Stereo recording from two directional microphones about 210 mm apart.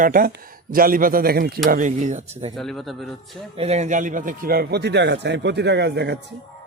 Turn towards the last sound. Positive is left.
turn(degrees=-50)  # may be behind; listen again after turning